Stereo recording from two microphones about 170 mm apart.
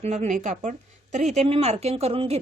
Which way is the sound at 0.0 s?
40° right (ahead or behind).